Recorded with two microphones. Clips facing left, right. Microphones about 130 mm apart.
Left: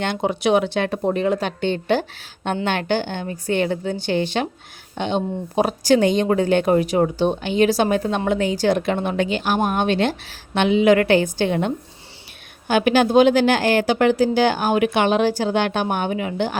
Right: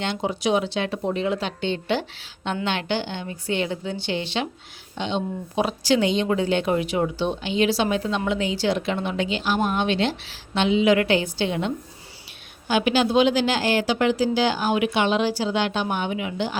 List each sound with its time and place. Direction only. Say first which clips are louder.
0.0 s speech: left 4 dB; 55° left (ahead or behind)